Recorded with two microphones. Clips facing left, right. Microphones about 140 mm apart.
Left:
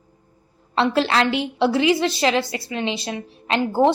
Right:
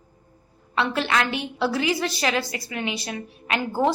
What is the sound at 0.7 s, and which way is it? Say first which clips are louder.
A woman's voice: left 5 dB; 30° left (ahead or behind).